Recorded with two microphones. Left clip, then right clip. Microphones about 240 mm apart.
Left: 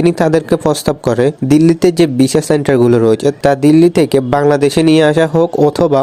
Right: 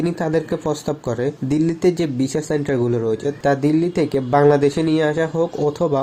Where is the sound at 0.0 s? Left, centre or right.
Left.